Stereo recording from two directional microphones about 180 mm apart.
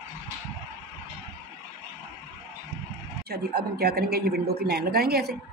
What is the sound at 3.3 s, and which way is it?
A woman's voice, 60° right (ahead or behind).